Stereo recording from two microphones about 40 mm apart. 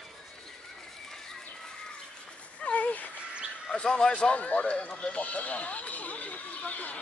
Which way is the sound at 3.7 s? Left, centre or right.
Left.